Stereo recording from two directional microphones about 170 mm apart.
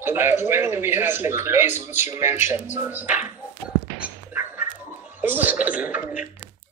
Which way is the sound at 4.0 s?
10° right (ahead or behind).